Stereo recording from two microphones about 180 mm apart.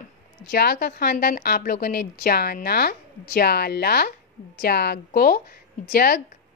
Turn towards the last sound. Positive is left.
turn(degrees=55)  # may be behind; listen again after turning